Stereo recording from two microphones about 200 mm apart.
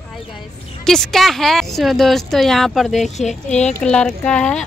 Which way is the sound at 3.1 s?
35° left (ahead or behind).